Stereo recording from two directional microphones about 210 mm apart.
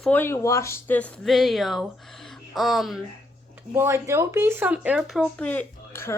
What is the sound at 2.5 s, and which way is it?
Music, centre (ahead or behind).